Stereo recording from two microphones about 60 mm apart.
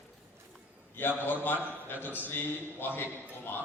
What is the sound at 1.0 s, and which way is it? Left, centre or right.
A man's voice, left.